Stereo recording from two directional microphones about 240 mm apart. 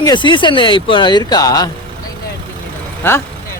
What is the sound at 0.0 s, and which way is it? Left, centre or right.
Speech, centre.